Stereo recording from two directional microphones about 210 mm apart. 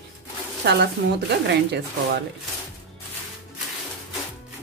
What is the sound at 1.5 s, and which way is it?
Speech, 55° right (ahead or behind).